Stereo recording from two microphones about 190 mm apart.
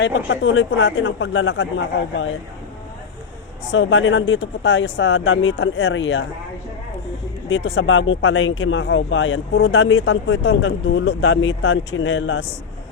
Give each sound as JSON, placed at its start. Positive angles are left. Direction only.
{"t": 0.0, "sound": "speech", "side_deg": 75}
{"t": 3.7, "sound": "speech", "side_deg": 85}
{"t": 7.5, "sound": "speech", "side_deg": 90}